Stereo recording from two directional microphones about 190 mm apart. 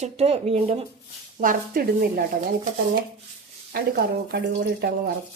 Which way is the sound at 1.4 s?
45° right (ahead or behind).